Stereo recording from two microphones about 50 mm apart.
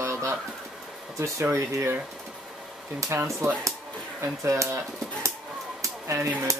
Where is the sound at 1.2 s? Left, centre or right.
Right.